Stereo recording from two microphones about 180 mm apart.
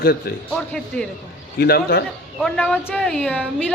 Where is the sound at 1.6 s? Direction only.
60° left (ahead or behind).